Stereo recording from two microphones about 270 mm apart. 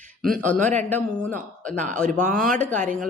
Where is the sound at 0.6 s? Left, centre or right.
Right.